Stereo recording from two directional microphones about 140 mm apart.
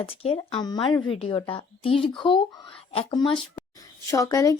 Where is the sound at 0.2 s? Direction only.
45° left (ahead or behind).